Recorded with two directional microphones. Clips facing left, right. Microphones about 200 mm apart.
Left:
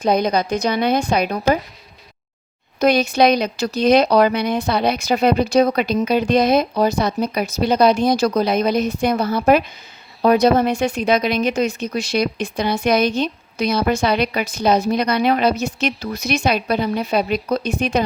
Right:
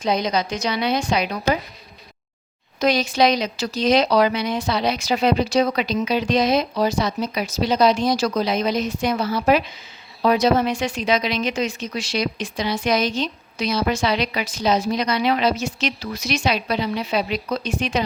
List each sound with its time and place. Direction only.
0.0 s a woman's voice: 55° left (ahead or behind)
2.8 s a woman's voice: 55° left (ahead or behind)